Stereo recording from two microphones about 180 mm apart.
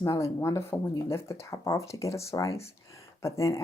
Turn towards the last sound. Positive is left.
turn(degrees=15)  # may be behind; listen again after turning